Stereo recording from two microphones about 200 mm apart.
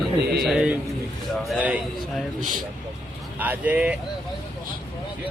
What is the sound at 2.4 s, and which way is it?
Speech, 40° right (ahead or behind).